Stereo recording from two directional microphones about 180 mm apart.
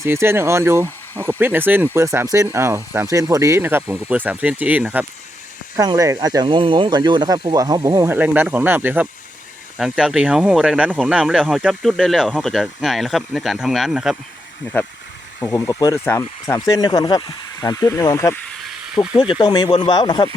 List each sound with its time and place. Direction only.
0.0 s speech: 15° right (ahead or behind)
5.9 s speech: 20° right (ahead or behind); by 14.2 s 5° right (ahead or behind)
15.4 s speech: 15° left (ahead or behind)